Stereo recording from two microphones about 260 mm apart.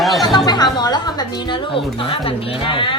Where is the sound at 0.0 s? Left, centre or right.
Centre.